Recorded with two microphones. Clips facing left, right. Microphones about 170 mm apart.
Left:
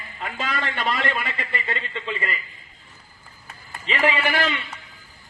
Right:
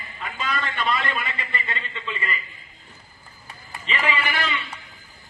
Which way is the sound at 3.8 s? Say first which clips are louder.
Left 4 dB; 50° left (ahead or behind).